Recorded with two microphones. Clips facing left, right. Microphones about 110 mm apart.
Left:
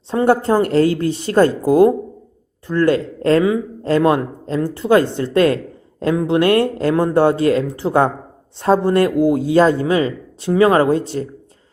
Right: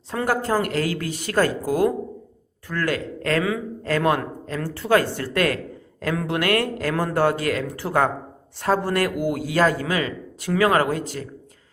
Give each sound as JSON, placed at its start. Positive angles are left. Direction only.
{"t": 0.1, "sound": "a man's voice", "side_deg": 30}